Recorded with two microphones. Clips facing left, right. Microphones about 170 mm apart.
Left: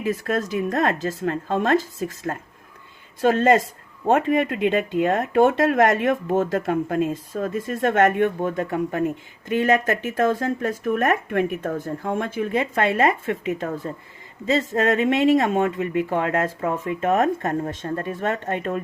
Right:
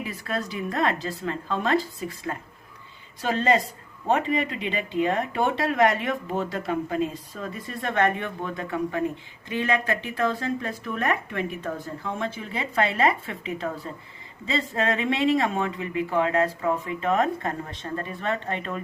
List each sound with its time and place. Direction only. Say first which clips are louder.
0.0 s speech: left 7 dB; 45° left (ahead or behind)